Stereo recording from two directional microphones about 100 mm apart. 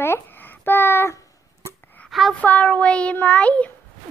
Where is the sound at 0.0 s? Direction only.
20° left (ahead or behind).